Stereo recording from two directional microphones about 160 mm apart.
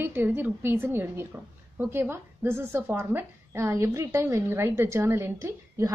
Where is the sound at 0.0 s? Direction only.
15° right (ahead or behind).